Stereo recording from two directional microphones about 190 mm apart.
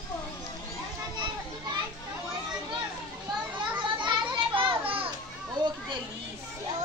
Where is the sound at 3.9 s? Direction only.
25° right (ahead or behind).